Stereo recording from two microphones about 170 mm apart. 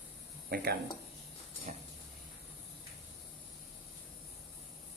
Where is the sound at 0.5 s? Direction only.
70° right (ahead or behind).